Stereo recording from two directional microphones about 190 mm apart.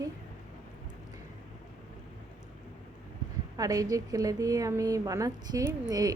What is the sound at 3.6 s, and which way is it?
A woman's voice, 20° right (ahead or behind).